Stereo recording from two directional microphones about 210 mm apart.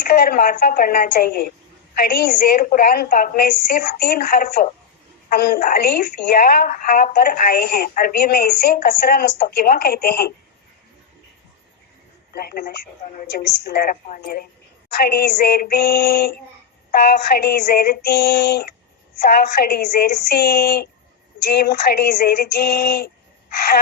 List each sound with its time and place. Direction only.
0.1 s a woman's voice: 45° left (ahead or behind)
12.3 s a woman's voice: 45° left (ahead or behind)
14.9 s a woman's voice: 50° left (ahead or behind)